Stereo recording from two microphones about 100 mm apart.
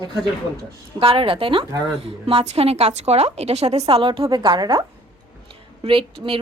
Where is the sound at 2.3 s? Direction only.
85° right.